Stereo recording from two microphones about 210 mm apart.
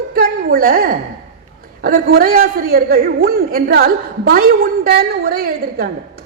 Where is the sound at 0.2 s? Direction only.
45° right (ahead or behind).